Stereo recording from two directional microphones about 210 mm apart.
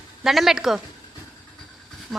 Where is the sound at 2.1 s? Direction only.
Centre (ahead or behind).